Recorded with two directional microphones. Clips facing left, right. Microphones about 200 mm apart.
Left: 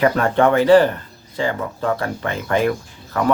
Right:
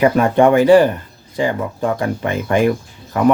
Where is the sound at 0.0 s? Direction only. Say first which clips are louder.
Right 4 dB; 15° right (ahead or behind).